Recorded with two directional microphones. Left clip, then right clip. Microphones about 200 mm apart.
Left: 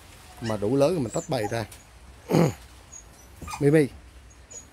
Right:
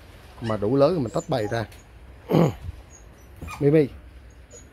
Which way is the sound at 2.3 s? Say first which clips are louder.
Right 2 dB; 20° left (ahead or behind).